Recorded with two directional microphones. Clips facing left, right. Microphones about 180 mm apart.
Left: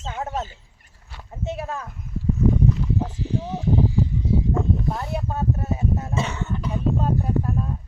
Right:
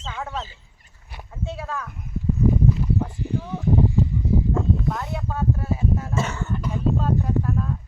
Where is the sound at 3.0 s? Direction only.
90° left.